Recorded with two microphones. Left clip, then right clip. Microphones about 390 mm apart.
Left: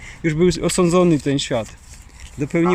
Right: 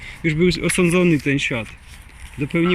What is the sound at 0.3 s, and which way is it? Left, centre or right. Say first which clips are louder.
Speech: left 2 dB; centre.